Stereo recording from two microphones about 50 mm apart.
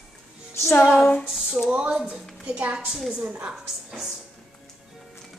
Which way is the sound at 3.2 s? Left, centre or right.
Right.